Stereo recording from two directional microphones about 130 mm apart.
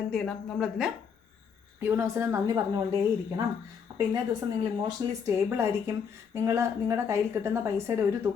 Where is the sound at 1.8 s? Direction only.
20° right (ahead or behind).